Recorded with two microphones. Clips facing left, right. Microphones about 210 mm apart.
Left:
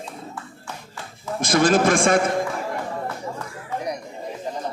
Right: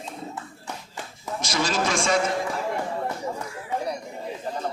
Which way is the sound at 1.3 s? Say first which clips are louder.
Left 8 dB; 55° left (ahead or behind).